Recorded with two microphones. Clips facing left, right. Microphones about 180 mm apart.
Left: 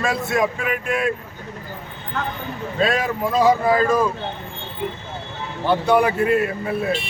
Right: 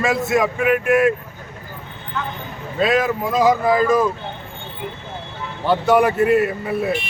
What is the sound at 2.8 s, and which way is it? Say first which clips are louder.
Speech: right 3 dB; centre (ahead or behind).